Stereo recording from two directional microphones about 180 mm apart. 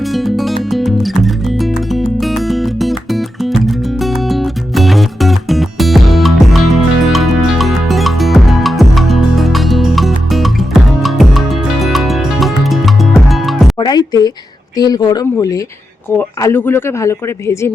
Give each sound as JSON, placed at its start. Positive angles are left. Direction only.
{"t": 0.1, "sound": "music", "side_deg": 0}
{"t": 13.7, "sound": "music", "side_deg": 25}
{"t": 14.8, "sound": "speech", "side_deg": 20}